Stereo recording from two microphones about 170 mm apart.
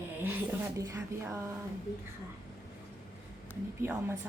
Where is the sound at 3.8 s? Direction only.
15° right (ahead or behind).